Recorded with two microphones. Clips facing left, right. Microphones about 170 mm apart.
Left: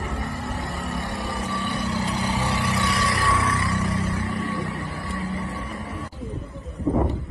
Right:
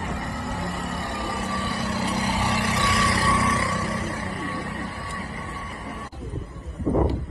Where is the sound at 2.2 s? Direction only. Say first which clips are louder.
Even; 15° right (ahead or behind).